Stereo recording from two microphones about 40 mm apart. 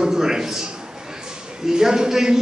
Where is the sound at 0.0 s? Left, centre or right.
Centre.